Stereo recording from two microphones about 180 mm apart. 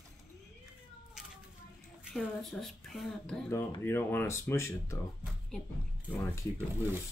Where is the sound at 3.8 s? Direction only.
10° left (ahead or behind).